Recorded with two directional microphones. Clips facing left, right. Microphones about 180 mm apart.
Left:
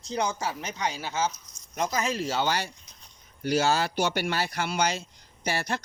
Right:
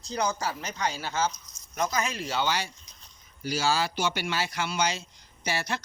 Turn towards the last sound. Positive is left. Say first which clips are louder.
# left 2 dB
turn(degrees=50)  # may be behind; listen again after turning